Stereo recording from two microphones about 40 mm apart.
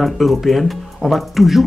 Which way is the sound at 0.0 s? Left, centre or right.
Centre.